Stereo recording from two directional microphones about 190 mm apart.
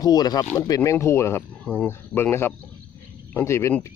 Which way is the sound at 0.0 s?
20° left (ahead or behind).